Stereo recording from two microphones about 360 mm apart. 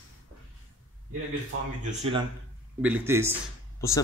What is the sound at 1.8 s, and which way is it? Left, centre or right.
Speech, centre.